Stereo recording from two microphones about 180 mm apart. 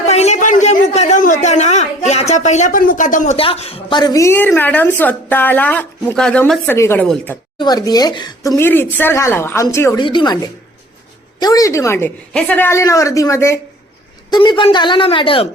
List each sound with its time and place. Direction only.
0.0 s a sound: 35° left (ahead or behind)
3.3 s a woman's voice: 30° left (ahead or behind); by 10.0 s 15° left (ahead or behind)
10.0 s a woman's voice: 25° left (ahead or behind)